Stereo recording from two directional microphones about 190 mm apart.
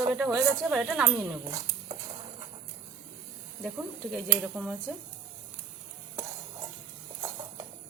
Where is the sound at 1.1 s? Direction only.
15° right (ahead or behind).